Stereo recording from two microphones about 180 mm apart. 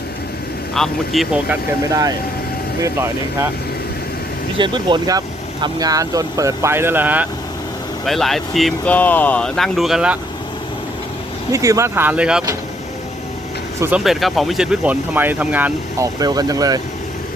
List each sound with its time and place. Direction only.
0.7 s speech: centre (ahead or behind)
1.9 s speech: 20° right (ahead or behind)
4.5 s speech: 25° right (ahead or behind); by 7.3 s 10° right (ahead or behind)
8.0 s speech: centre (ahead or behind)
11.5 s speech: 15° right (ahead or behind)
13.7 s speech: 15° right (ahead or behind)
14.0 s speech: centre (ahead or behind)
16.2 s speech: 20° right (ahead or behind)